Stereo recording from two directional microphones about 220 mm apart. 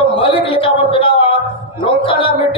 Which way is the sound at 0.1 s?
25° left (ahead or behind).